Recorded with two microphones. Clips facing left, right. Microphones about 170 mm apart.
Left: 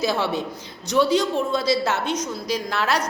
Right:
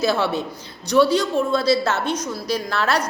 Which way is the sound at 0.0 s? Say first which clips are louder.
Right 2 dB; 15° left (ahead or behind).